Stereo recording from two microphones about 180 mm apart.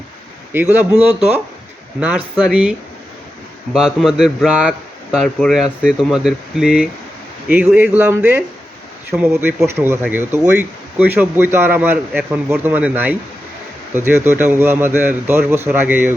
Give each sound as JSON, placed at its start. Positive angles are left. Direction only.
{"t": 0.5, "sound": "a man's voice", "side_deg": -10}